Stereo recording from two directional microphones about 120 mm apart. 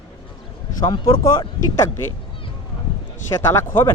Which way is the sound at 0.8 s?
40° left (ahead or behind).